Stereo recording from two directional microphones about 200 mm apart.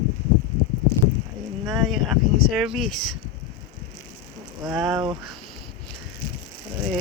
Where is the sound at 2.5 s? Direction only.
Centre (ahead or behind).